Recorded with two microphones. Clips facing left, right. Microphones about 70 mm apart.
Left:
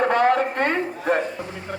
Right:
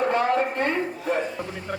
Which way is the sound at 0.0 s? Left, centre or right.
Left.